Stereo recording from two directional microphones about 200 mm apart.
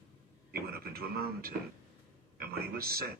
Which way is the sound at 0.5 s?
50° right (ahead or behind).